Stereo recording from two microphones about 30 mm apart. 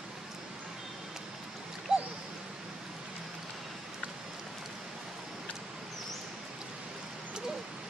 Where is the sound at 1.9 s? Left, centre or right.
Right.